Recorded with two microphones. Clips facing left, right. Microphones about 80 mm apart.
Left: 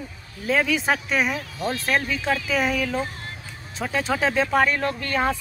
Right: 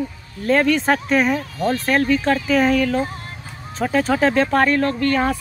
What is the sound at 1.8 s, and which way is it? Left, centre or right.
Speech, centre.